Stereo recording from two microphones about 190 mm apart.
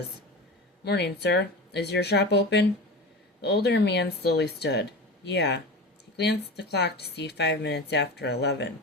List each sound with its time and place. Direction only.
0.9 s speech: 60° left (ahead or behind)